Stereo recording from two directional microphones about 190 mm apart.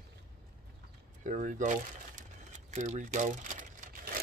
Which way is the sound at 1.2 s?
40° right (ahead or behind).